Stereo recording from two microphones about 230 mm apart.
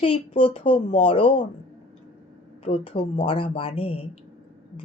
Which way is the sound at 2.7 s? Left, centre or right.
Left.